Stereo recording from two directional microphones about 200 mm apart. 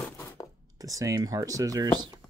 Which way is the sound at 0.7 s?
15° right (ahead or behind).